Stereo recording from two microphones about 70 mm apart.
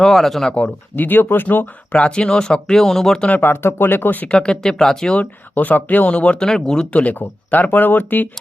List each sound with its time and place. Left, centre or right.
0.0 s speech: centre
0.5 s speech: left; by 3.2 s centre
3.2 s speech: left
3.5 s speech: left
4.3 s speech: centre
6.9 s speech: left